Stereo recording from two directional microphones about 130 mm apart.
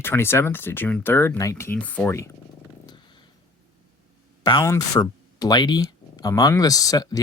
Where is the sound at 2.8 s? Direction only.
35° left (ahead or behind).